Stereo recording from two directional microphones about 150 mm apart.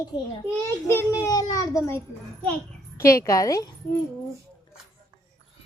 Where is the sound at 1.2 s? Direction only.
25° left (ahead or behind).